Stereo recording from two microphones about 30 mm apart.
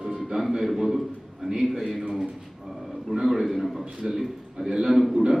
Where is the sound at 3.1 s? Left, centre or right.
Centre.